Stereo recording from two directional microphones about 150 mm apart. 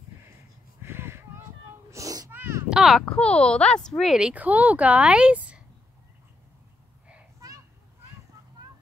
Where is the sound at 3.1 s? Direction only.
5° left (ahead or behind); by 5.6 s 10° right (ahead or behind).